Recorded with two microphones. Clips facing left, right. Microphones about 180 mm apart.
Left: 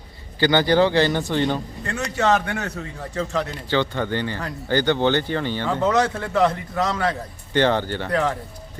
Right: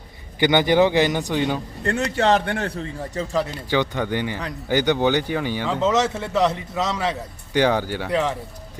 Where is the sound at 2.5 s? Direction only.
30° right (ahead or behind).